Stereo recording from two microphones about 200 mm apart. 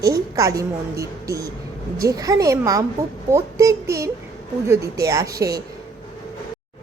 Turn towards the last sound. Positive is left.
turn(degrees=-15)  # may be behind; listen again after turning